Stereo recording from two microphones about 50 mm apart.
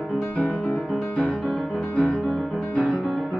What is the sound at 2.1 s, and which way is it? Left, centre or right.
Music, centre.